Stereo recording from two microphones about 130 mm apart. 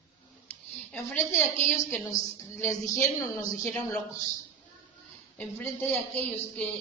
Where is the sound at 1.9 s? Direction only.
25° left (ahead or behind).